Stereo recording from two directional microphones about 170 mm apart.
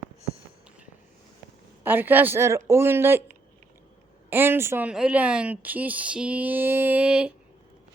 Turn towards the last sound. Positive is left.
turn(degrees=-5)  # may be behind; listen again after turning